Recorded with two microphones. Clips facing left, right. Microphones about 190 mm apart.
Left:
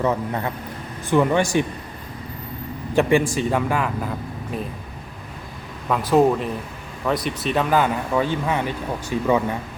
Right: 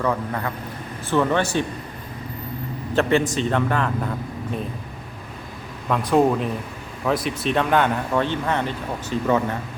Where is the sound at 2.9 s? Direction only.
15° left (ahead or behind).